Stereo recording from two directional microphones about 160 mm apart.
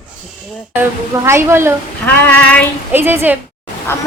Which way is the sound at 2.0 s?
10° left (ahead or behind).